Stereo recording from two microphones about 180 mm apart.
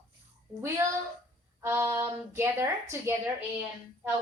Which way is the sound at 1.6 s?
15° right (ahead or behind).